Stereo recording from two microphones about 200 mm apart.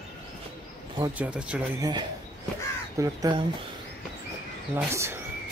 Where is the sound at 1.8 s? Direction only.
20° right (ahead or behind).